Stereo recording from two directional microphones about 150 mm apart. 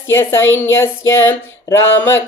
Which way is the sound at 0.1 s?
15° left (ahead or behind).